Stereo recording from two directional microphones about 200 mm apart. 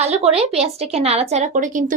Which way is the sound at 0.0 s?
30° right (ahead or behind).